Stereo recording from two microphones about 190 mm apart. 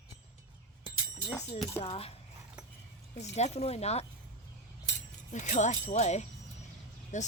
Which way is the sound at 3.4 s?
35° left (ahead or behind).